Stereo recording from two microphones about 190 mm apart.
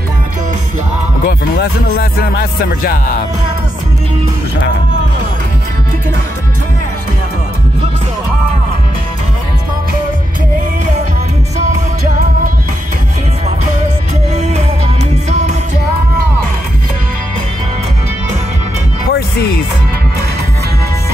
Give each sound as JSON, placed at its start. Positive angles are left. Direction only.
{"t": 1.2, "sound": "speech", "side_deg": 55}